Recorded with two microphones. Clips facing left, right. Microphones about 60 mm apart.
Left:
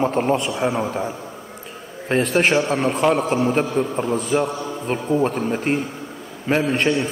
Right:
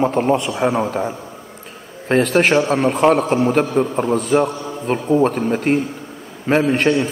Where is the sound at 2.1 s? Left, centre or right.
Right.